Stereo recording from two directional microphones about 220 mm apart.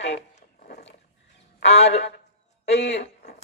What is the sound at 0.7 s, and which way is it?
Dog, 30° left (ahead or behind).